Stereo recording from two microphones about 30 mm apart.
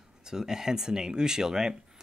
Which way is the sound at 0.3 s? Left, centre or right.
Centre.